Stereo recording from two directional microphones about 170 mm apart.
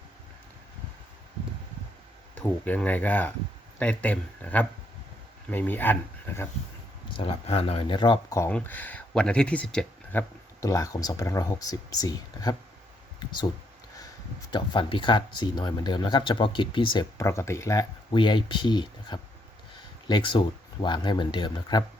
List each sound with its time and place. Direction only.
2.3 s speech: 10° left (ahead or behind)
7.2 s speech: 35° left (ahead or behind)
8.4 s speech: 10° left (ahead or behind)
13.9 s speech: 20° left (ahead or behind)